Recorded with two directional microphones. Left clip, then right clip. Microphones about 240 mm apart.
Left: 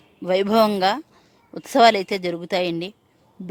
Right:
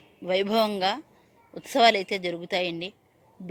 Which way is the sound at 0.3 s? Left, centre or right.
Left.